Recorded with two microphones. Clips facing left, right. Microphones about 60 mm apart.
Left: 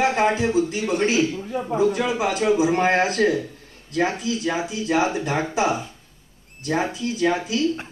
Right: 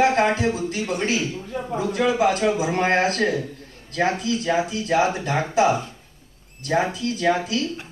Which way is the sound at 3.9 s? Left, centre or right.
Right.